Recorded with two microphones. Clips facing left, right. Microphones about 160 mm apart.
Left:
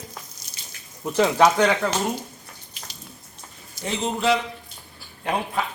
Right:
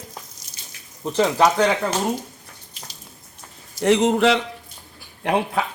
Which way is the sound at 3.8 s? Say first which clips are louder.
Right 7 dB; 80° right.